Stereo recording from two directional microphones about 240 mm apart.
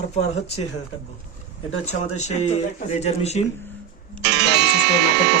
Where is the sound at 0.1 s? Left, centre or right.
Left.